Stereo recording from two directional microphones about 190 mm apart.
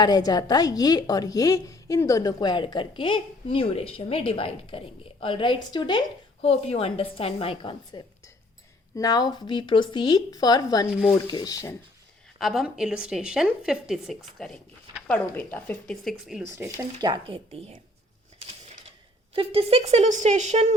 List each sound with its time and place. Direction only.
0.0 s a woman's voice: 20° left (ahead or behind)
12.4 s a woman's voice: centre (ahead or behind)
16.6 s speech: 20° right (ahead or behind)
19.3 s speech: 30° right (ahead or behind)